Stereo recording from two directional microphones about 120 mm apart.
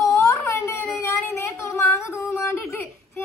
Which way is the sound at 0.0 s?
25° left (ahead or behind).